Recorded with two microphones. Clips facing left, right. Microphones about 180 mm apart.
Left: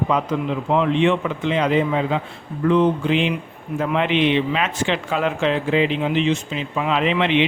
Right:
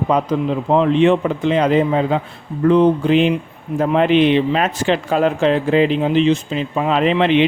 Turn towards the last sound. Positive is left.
turn(degrees=-40)  # may be behind; listen again after turning